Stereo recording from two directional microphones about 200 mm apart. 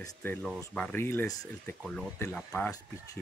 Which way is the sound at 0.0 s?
10° left (ahead or behind).